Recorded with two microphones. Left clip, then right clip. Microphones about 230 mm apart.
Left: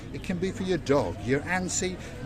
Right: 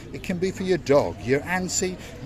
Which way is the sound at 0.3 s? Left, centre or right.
Right.